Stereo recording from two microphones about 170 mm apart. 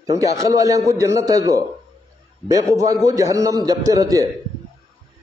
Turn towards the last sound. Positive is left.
turn(degrees=-20)  # may be behind; listen again after turning